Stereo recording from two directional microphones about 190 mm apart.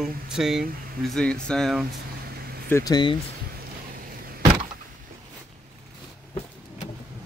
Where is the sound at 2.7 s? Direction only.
20° left (ahead or behind).